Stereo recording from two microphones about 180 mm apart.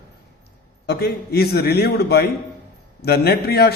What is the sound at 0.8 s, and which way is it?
A man's voice, 60° left (ahead or behind).